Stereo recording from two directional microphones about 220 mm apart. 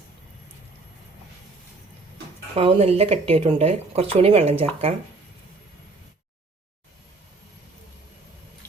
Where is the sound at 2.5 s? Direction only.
30° right (ahead or behind).